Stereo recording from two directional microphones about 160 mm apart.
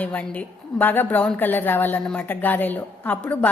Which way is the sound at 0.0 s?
10° left (ahead or behind).